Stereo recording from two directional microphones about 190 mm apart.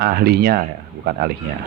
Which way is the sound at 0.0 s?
55° right (ahead or behind).